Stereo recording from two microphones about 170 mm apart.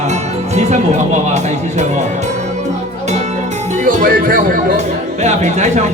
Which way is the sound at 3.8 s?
55° right (ahead or behind).